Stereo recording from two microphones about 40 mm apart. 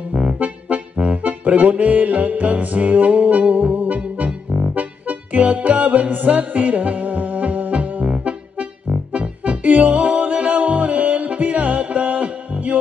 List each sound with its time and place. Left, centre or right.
0.1 s music: right
8.2 s music: right